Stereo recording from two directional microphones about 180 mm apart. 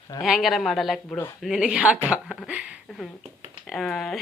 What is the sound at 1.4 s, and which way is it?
Speech, centre (ahead or behind).